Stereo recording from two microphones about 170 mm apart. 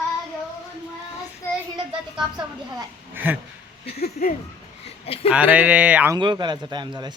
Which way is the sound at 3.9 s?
65° left (ahead or behind).